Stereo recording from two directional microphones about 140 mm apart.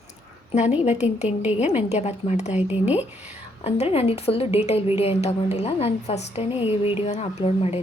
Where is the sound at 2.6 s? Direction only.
10° right (ahead or behind).